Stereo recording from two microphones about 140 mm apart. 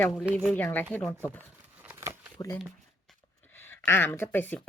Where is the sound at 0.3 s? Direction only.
10° left (ahead or behind).